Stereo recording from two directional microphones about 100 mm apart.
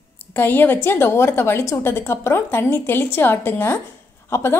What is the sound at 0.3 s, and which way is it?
A woman's voice, 20° left (ahead or behind).